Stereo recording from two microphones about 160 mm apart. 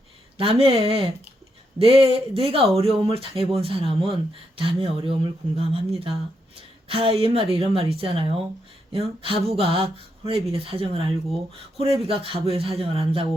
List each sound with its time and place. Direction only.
0.3 s a woman's voice: 35° right (ahead or behind)